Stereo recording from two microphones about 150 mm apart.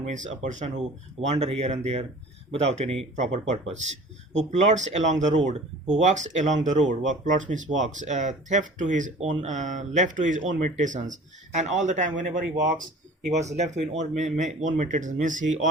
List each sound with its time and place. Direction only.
0.1 s speech: 55° right (ahead or behind)
13.3 s speech: 50° right (ahead or behind)